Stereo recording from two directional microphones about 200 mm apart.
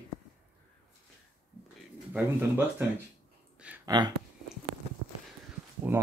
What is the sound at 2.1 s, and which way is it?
Speech, 10° right (ahead or behind).